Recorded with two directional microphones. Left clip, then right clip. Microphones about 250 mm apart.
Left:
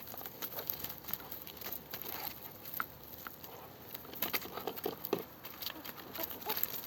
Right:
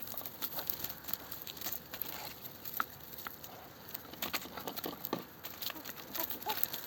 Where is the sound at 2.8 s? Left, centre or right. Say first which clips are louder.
Right 3 dB; centre.